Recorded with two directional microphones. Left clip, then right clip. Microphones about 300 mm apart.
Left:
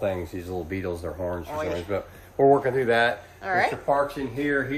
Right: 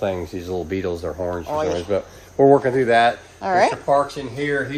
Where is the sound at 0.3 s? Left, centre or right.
Right.